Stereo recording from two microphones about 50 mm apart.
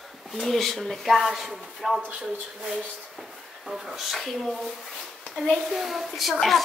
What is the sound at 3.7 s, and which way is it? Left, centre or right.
Speech, centre.